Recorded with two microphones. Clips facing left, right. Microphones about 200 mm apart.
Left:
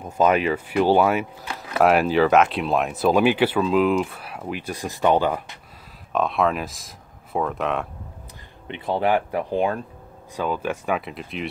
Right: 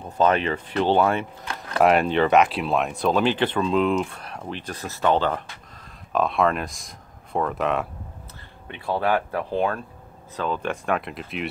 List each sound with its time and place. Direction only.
0.0 s speech: 10° left (ahead or behind)
6.1 s speech: centre (ahead or behind)
8.6 s speech: 20° left (ahead or behind); by 11.4 s centre (ahead or behind)